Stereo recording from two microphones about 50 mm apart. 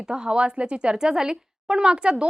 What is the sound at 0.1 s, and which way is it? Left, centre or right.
A woman's voice, centre.